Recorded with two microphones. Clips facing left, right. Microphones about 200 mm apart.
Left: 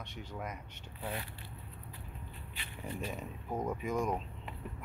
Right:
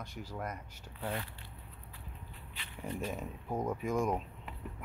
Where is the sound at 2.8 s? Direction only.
5° left (ahead or behind).